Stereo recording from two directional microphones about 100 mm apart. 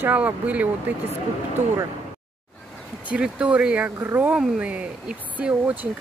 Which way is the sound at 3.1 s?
10° right (ahead or behind).